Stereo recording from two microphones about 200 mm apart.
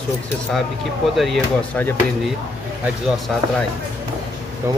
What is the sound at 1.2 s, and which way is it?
Speech, 5° left (ahead or behind).